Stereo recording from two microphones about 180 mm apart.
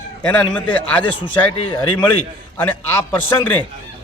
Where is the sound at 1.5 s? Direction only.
35° left (ahead or behind).